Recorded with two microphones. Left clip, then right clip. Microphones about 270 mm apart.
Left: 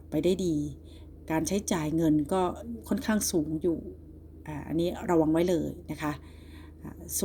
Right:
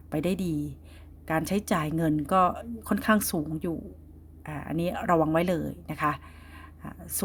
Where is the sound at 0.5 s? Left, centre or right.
Right.